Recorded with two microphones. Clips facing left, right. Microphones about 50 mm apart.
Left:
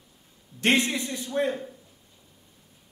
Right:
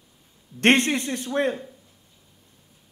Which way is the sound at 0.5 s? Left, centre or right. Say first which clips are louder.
Right 4 dB; right.